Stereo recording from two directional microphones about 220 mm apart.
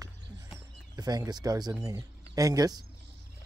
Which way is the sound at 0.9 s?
15° right (ahead or behind).